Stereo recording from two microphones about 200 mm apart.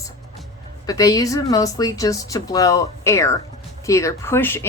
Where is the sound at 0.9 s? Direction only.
15° left (ahead or behind).